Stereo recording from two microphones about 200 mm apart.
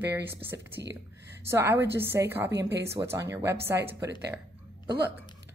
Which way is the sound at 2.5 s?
55° right (ahead or behind).